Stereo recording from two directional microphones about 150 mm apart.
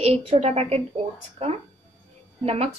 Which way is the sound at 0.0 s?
45° right (ahead or behind).